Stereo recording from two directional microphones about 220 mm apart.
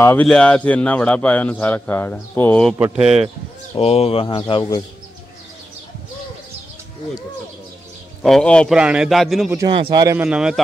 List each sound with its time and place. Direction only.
0.0 s a man's voice: 5° left (ahead or behind)
3.7 s speech: 25° left (ahead or behind)
8.2 s a man's voice: centre (ahead or behind)
9.6 s a man's voice: 20° right (ahead or behind)
10.2 s a man's voice: 5° right (ahead or behind)